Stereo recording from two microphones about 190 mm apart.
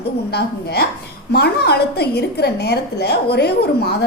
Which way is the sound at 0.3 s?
55° left (ahead or behind).